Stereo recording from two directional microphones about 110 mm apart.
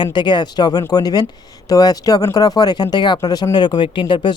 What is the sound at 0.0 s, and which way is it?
Speech, 45° left (ahead or behind).